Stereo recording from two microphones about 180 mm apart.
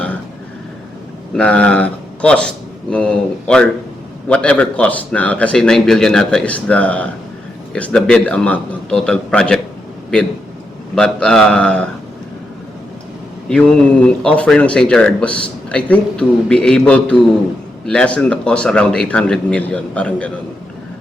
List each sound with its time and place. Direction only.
1.3 s a man's voice: 5° left (ahead or behind)
10.9 s speech: 5° left (ahead or behind)
13.5 s speech: 5° left (ahead or behind)